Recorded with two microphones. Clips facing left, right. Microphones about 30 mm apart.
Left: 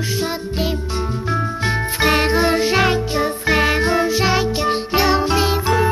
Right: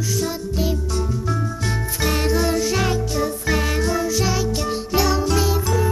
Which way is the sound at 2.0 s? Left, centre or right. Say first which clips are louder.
Left 4 dB; left.